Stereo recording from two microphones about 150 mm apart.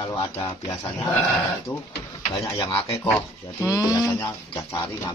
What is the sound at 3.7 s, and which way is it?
Speech, 25° left (ahead or behind).